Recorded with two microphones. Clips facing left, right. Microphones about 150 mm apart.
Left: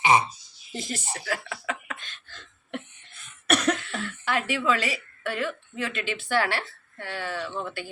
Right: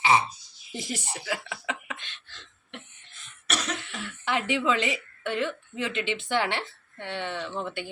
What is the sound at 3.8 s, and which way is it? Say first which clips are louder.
Speech: left 4 dB; 15° right (ahead or behind).